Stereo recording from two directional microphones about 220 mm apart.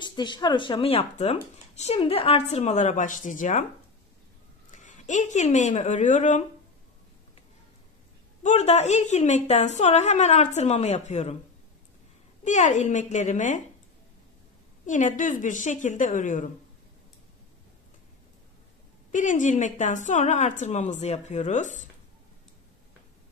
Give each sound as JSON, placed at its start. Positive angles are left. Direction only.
{"t": 0.0, "sound": "speech", "side_deg": 20}
{"t": 4.6, "sound": "a woman's voice", "side_deg": 35}
{"t": 8.4, "sound": "a woman's voice", "side_deg": 30}
{"t": 12.4, "sound": "a woman's voice", "side_deg": 35}
{"t": 14.9, "sound": "a woman's voice", "side_deg": 35}
{"t": 19.1, "sound": "a woman's voice", "side_deg": 35}